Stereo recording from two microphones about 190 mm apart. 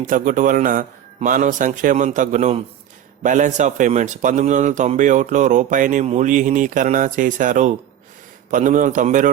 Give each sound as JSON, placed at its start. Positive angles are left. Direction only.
{"t": 0.1, "sound": "a man's voice", "side_deg": -45}